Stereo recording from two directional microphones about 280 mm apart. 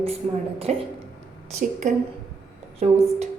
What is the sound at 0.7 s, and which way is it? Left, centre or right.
Speech, right.